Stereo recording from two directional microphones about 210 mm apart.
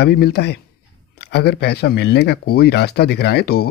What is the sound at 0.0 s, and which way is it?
Speech, 50° left (ahead or behind).